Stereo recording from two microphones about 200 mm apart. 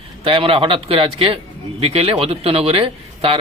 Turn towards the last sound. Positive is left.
turn(degrees=-30)  # may be behind; listen again after turning